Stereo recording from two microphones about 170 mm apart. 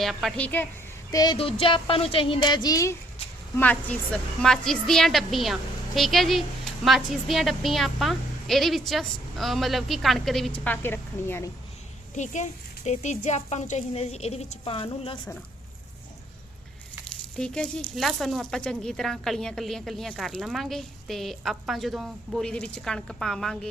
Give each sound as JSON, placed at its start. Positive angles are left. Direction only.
{"t": 0.0, "sound": "speech", "side_deg": 0}
{"t": 1.1, "sound": "speech", "side_deg": 25}
{"t": 3.6, "sound": "speech", "side_deg": 10}
{"t": 12.1, "sound": "speech", "side_deg": 45}
{"t": 17.3, "sound": "speech", "side_deg": 5}